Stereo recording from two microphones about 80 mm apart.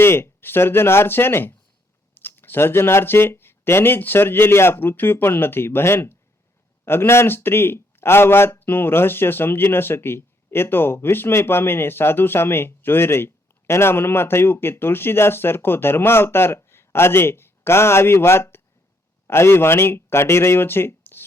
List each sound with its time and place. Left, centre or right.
0.0 s a man's voice: left